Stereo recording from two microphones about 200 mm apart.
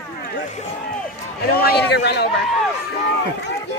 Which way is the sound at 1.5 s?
50° left (ahead or behind).